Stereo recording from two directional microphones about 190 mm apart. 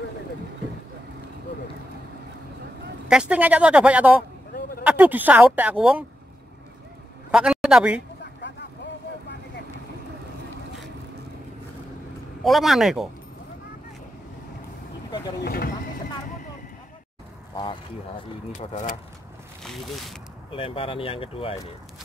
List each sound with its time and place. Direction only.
3.1 s speech: 5° right (ahead or behind)
7.2 s a man's voice: 5° right (ahead or behind)
8.2 s vehicle: 65° left (ahead or behind)
12.4 s speech: centre (ahead or behind)
15.4 s speech: 50° left (ahead or behind)
18.6 s speech: 35° left (ahead or behind)
19.6 s speech: centre (ahead or behind)
20.5 s speech: 30° left (ahead or behind)